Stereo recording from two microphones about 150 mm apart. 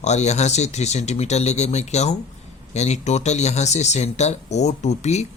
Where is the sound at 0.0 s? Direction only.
50° left (ahead or behind).